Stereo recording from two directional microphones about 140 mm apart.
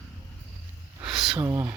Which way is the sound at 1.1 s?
Centre (ahead or behind).